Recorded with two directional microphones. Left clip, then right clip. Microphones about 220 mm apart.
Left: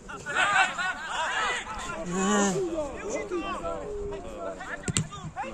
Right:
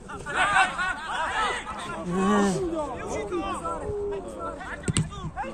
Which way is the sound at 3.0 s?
25° right (ahead or behind).